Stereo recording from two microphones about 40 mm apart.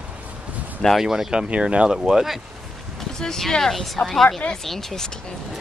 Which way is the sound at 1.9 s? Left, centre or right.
Centre.